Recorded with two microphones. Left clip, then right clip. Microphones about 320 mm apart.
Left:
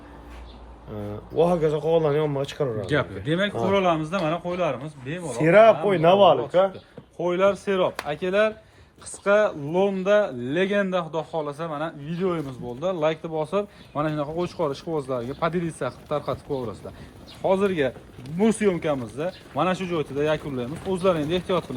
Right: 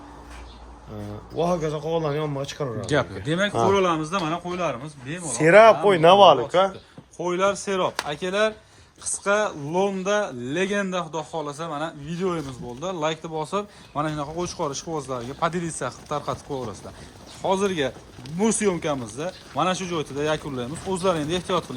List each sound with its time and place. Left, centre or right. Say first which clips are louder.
1.4 s speech: left 3 dB; centre
2.8 s speech: right 1 dB; centre
5.3 s speech: right 2 dB; right
7.2 s speech: left 2 dB; centre